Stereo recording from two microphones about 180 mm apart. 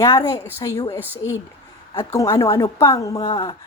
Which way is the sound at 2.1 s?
20° left (ahead or behind).